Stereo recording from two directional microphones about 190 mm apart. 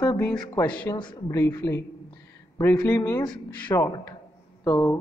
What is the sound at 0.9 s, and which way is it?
A man's voice, 20° left (ahead or behind).